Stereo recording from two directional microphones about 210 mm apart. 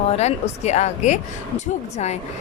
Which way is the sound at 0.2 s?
30° left (ahead or behind).